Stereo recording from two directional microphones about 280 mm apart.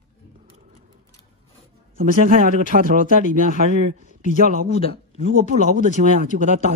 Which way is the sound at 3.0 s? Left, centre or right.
Left.